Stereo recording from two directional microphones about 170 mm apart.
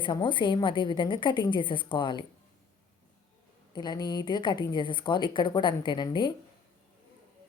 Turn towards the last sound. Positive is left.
turn(degrees=25)  # may be behind; listen again after turning